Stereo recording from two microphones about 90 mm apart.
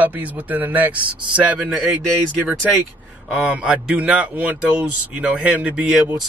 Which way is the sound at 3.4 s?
15° right (ahead or behind).